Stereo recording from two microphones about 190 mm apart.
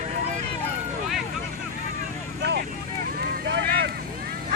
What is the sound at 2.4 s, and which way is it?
Vehicle, 65° right (ahead or behind).